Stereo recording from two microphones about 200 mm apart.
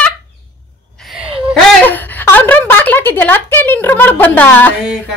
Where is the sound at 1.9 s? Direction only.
10° left (ahead or behind).